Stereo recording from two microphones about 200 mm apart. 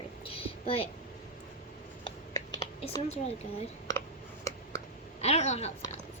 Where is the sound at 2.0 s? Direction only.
20° left (ahead or behind).